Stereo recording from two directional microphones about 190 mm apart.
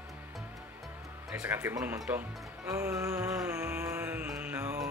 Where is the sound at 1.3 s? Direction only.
10° right (ahead or behind).